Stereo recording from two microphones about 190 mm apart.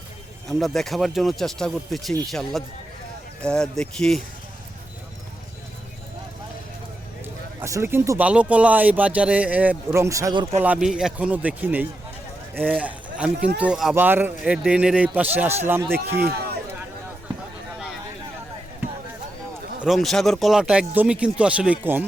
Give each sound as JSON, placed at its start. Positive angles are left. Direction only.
{"t": 0.4, "sound": "speech", "side_deg": 0}
{"t": 7.6, "sound": "speech", "side_deg": -15}
{"t": 10.6, "sound": "speech", "side_deg": -5}
{"t": 19.8, "sound": "speech", "side_deg": 0}